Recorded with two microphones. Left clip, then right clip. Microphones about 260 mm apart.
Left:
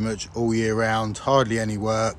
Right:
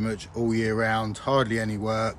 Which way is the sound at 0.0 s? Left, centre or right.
Centre.